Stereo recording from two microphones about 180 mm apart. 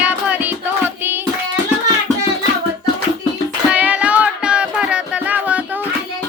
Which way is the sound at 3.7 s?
5° right (ahead or behind).